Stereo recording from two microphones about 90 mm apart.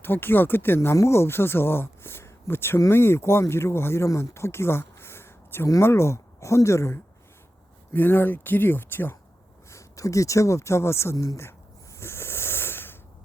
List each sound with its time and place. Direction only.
0.0 s speech: 25° left (ahead or behind)
9.6 s speech: 35° left (ahead or behind)
11.9 s snake: 30° left (ahead or behind)